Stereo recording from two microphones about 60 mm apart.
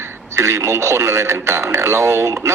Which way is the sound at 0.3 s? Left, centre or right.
Right.